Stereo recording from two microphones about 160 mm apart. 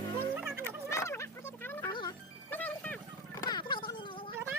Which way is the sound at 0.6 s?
20° left (ahead or behind).